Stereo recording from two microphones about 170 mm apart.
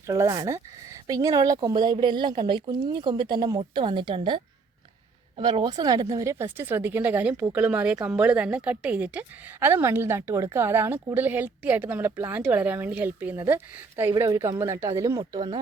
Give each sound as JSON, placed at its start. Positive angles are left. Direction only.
{"t": 0.1, "sound": "a woman's voice", "side_deg": -20}
{"t": 5.4, "sound": "a woman's voice", "side_deg": -25}